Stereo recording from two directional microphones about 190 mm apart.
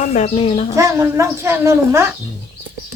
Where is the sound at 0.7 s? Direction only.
15° right (ahead or behind).